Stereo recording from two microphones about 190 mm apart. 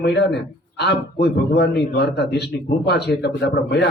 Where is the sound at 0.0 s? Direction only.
60° left (ahead or behind).